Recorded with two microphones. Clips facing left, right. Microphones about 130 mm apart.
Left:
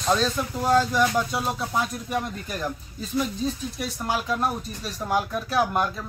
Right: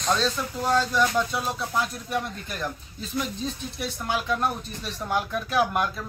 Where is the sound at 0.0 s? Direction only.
5° left (ahead or behind).